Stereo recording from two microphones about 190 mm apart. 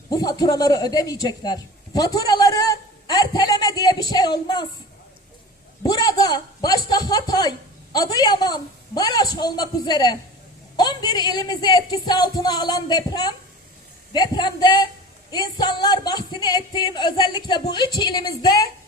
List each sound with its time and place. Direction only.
0.1 s a man's voice: 20° left (ahead or behind)
5.8 s speech: 20° left (ahead or behind)